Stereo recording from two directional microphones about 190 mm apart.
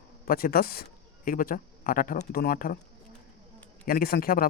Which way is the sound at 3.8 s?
50° left (ahead or behind).